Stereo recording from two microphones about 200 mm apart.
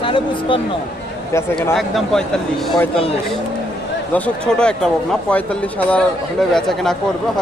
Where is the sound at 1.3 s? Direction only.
10° left (ahead or behind).